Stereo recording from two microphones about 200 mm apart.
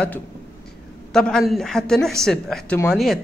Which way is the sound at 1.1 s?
5° left (ahead or behind).